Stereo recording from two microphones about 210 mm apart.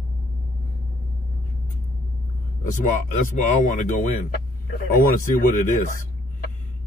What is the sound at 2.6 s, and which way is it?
A man's voice, 40° left (ahead or behind).